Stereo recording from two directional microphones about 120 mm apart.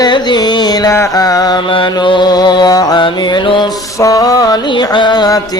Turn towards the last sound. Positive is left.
turn(degrees=35)  # may be behind; listen again after turning